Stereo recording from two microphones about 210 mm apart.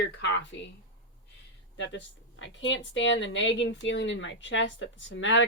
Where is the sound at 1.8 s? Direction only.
60° left (ahead or behind).